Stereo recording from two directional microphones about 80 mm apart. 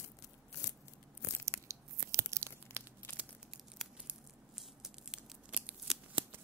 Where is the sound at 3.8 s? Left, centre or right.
Centre.